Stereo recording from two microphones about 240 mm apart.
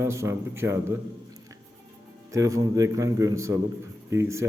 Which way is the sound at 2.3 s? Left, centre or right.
Centre.